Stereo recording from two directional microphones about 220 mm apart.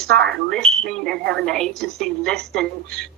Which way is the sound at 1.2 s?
50° right (ahead or behind).